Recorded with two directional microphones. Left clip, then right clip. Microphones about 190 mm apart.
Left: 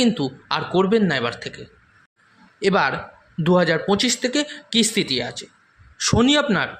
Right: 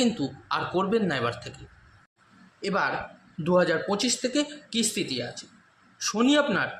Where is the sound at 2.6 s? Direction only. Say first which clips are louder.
Left 8 dB; 35° left (ahead or behind).